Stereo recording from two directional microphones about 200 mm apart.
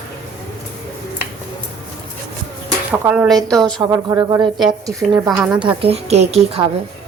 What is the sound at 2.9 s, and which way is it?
Speech, 5° right (ahead or behind).